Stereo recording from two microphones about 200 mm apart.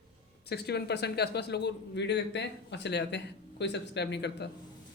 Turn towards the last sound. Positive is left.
turn(degrees=60)  # may be behind; listen again after turning